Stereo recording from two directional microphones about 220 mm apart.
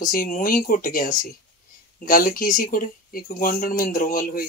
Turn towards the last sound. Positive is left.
turn(degrees=40)  # may be behind; listen again after turning